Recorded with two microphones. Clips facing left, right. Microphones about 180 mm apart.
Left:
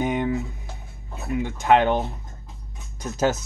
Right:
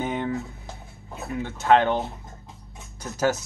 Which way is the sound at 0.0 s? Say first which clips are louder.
Left 4 dB; 15° left (ahead or behind).